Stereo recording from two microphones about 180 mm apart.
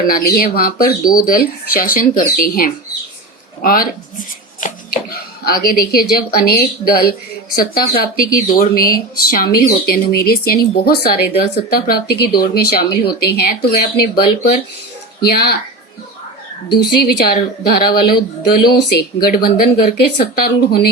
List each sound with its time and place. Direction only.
0.0 s speech: 55° left (ahead or behind)
5.5 s speech: 55° left (ahead or behind)
16.7 s speech: 60° left (ahead or behind)